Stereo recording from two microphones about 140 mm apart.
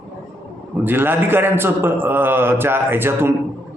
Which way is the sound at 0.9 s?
15° right (ahead or behind).